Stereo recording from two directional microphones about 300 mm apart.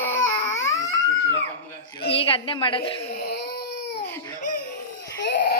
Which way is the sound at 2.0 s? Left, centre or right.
Centre.